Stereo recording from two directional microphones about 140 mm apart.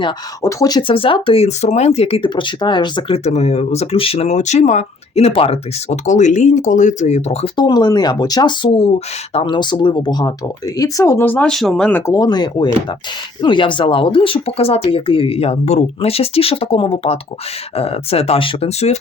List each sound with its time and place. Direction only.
0.4 s speech: 25° left (ahead or behind)
3.2 s speech: 50° left (ahead or behind)
7.5 s speech: 30° left (ahead or behind); by 11.9 s centre (ahead or behind)
11.9 s speech: 15° left (ahead or behind); by 18.9 s 45° left (ahead or behind)